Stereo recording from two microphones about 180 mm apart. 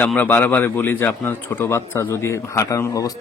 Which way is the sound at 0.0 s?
10° left (ahead or behind).